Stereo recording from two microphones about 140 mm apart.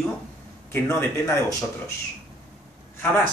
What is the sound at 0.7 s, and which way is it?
Speech, 15° left (ahead or behind).